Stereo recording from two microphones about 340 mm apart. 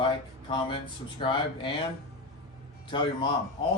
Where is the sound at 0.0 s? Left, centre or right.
Centre.